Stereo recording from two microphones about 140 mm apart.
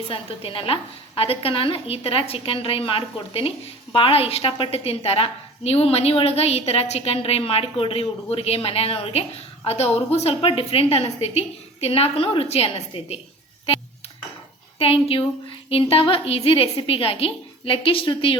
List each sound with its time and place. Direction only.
0.1 s a woman's voice: 40° left (ahead or behind)
14.8 s a woman's voice: 40° left (ahead or behind)